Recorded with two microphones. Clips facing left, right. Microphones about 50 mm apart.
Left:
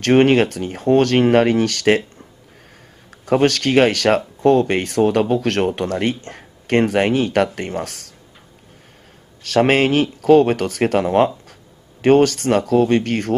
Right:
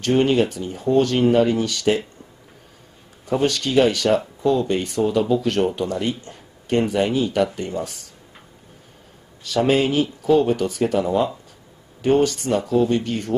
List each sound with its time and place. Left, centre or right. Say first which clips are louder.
0.0 s speech: left 4 dB; left
3.3 s speech: left 5 dB; left
9.4 s speech: left 3 dB; left